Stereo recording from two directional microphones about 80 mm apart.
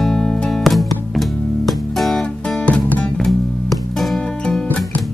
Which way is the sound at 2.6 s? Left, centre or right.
Centre.